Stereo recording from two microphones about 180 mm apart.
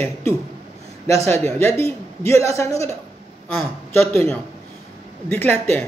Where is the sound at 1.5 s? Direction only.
15° left (ahead or behind).